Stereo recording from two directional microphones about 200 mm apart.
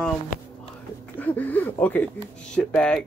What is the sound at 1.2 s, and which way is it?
Speech, 10° left (ahead or behind).